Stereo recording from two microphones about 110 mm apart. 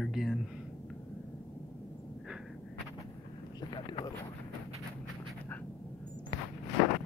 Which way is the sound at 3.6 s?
40° left (ahead or behind).